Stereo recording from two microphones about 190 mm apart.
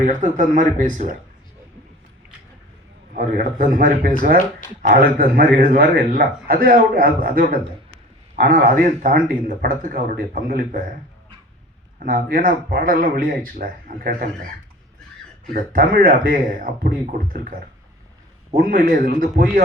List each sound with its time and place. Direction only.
0.0 s speech: 40° right (ahead or behind)
3.2 s speech: 45° right (ahead or behind)
11.9 s speech: 45° right (ahead or behind)
15.7 s speech: 45° right (ahead or behind)